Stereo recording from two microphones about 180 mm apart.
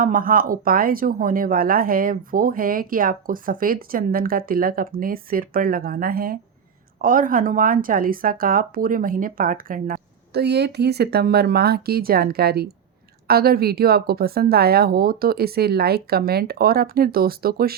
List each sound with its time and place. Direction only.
0.0 s speech: 50° right (ahead or behind)